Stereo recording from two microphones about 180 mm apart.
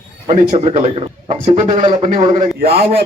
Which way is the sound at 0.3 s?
35° right (ahead or behind).